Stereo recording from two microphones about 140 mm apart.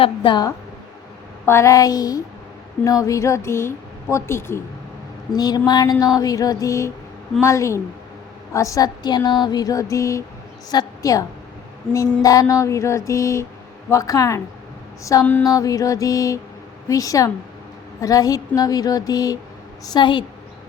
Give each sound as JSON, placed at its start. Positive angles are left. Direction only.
{"t": 0.0, "sound": "a woman's voice", "side_deg": 35}
{"t": 1.5, "sound": "a woman's voice", "side_deg": 20}
{"t": 5.3, "sound": "a woman's voice", "side_deg": 30}
{"t": 15.2, "sound": "a sound", "side_deg": 10}
{"t": 15.4, "sound": "a woman's voice", "side_deg": 25}